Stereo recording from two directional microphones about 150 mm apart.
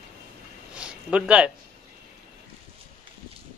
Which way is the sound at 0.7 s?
5° right (ahead or behind).